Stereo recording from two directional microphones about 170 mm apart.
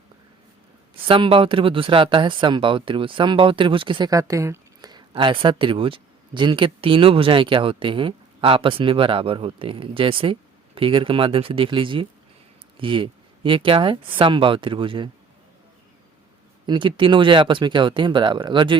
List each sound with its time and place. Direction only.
1.0 s speech: 30° right (ahead or behind)
16.6 s speech: 30° right (ahead or behind)